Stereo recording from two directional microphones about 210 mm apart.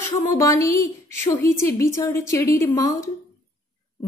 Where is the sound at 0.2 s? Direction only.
15° left (ahead or behind).